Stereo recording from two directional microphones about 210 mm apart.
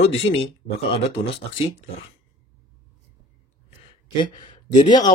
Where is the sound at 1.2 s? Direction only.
25° left (ahead or behind).